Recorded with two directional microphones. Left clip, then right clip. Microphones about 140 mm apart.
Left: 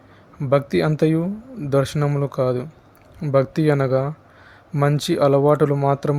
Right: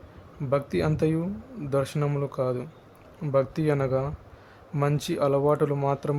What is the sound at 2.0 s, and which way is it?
Speech, 25° left (ahead or behind).